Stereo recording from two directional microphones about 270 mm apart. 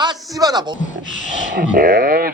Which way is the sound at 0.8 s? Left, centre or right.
Left.